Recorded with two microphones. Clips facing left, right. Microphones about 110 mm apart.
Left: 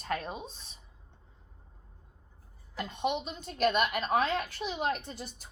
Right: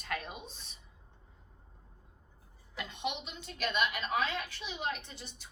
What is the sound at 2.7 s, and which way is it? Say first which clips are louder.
A woman's voice: left 6 dB; 40° left (ahead or behind).